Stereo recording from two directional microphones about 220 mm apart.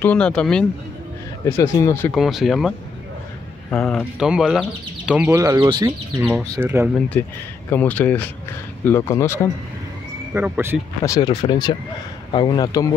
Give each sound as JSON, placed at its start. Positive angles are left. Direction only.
{"t": 0.0, "sound": "speech", "side_deg": 5}
{"t": 2.1, "sound": "speech", "side_deg": 0}
{"t": 3.7, "sound": "speech", "side_deg": 0}
{"t": 6.2, "sound": "speech", "side_deg": 0}
{"t": 10.3, "sound": "speech", "side_deg": -10}
{"t": 11.0, "sound": "speech", "side_deg": 15}